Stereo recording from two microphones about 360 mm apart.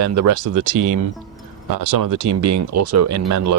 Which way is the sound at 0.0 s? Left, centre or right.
Right.